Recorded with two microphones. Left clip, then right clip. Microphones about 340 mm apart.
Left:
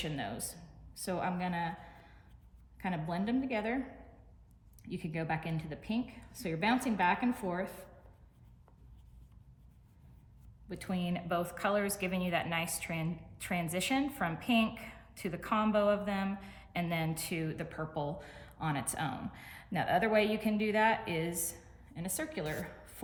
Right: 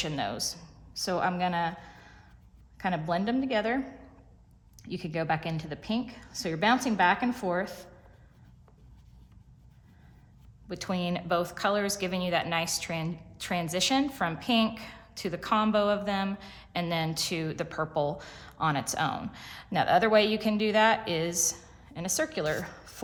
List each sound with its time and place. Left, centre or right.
0.0 s a woman's voice: centre
4.8 s a woman's voice: centre
10.7 s a woman's voice: centre